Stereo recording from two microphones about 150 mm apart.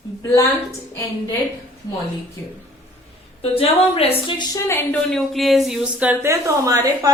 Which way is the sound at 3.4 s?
40° left (ahead or behind).